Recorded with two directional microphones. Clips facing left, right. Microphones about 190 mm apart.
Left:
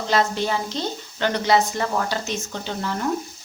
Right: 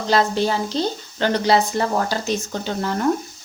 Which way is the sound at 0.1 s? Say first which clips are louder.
Right 3 dB; 35° right (ahead or behind).